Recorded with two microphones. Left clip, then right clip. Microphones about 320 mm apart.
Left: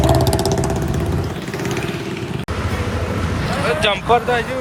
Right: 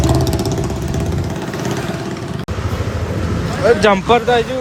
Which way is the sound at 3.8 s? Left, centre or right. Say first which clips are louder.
Right 3 dB; right.